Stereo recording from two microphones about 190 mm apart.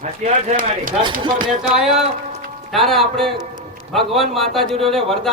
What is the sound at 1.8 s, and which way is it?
Speech, 5° right (ahead or behind).